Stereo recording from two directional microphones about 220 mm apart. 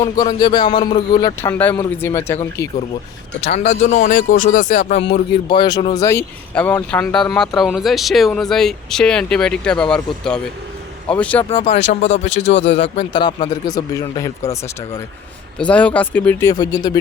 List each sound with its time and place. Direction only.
0.0 s a man's voice: 20° left (ahead or behind)
3.4 s a man's voice: 30° left (ahead or behind); by 11.4 s 5° left (ahead or behind)
11.4 s speech: 25° left (ahead or behind)
12.5 s speech: 55° left (ahead or behind)
13.0 s a man's voice: 20° left (ahead or behind)